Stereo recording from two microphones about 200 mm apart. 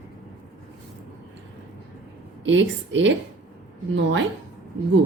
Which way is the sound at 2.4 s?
65° right (ahead or behind).